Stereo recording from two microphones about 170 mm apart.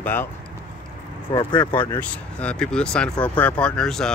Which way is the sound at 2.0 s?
5° left (ahead or behind).